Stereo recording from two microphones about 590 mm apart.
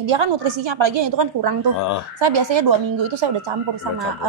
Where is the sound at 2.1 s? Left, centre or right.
Right.